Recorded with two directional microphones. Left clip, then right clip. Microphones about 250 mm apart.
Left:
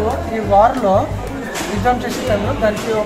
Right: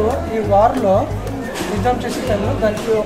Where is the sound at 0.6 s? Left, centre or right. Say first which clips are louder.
Left 2 dB; centre.